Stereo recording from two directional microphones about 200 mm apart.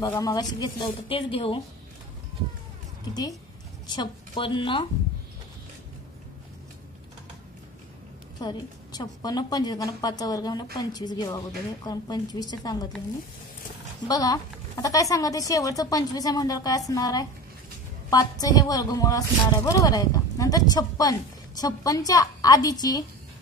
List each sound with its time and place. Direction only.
0.0 s a woman's voice: 15° left (ahead or behind)
3.8 s a woman's voice: 20° left (ahead or behind)
8.4 s a woman's voice: 20° left (ahead or behind)
14.0 s a woman's voice: 20° left (ahead or behind)